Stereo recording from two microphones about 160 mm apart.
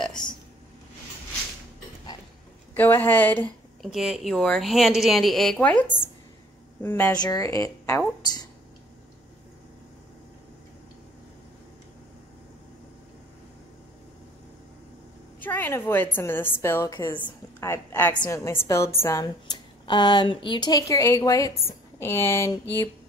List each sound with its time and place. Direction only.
0.0 s a sound: 5° left (ahead or behind)
2.7 s a woman's voice: 10° left (ahead or behind)
3.8 s a woman's voice: 5° right (ahead or behind); by 8.0 s 20° left (ahead or behind)
15.4 s a woman's voice: 10° left (ahead or behind)